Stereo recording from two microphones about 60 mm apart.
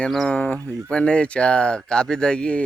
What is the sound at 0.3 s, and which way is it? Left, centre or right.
Speech, left.